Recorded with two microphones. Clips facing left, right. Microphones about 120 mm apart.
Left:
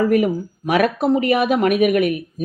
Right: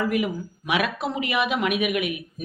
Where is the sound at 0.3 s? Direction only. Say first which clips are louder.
Left 7 dB; 40° left (ahead or behind).